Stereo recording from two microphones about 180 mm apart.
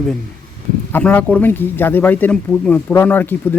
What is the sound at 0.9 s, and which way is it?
Speech, 10° left (ahead or behind).